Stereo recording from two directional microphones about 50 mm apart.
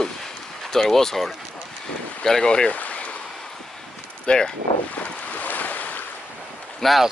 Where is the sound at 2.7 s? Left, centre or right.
Left.